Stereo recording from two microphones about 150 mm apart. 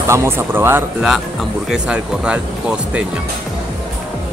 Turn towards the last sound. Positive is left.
turn(degrees=-5)  # may be behind; listen again after turning